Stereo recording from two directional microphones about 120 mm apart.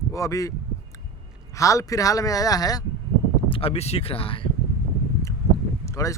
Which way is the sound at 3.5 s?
55° left (ahead or behind).